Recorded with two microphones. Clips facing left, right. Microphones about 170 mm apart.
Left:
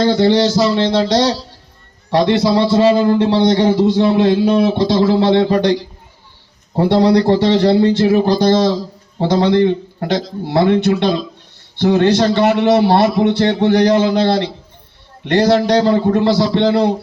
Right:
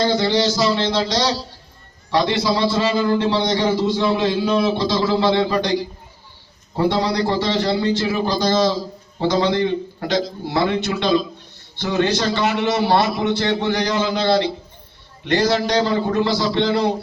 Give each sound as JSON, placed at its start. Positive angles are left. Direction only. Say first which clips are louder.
{"t": 0.0, "sound": "a man's voice", "louder": "left 6 dB", "side_deg": 60}
{"t": 6.7, "sound": "a man's voice", "louder": "left 7 dB", "side_deg": 60}